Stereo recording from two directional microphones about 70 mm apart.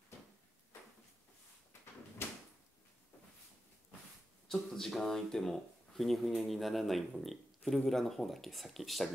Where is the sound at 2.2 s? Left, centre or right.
Left.